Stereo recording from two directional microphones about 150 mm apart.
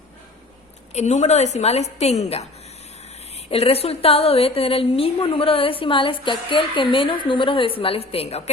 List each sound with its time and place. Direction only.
0.9 s a woman's voice: 50° left (ahead or behind)